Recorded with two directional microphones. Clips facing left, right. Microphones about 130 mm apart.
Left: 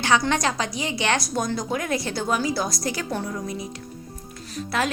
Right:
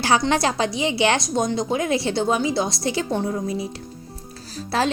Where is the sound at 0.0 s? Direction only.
30° right (ahead or behind).